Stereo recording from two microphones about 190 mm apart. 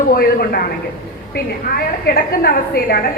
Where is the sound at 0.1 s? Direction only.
50° left (ahead or behind).